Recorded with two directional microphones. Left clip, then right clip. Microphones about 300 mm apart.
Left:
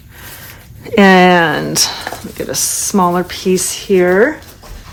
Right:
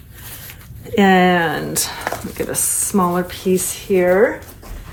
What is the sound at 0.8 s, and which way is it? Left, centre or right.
Speech, left.